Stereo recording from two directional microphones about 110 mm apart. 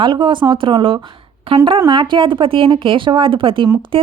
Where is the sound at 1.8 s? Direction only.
45° right (ahead or behind).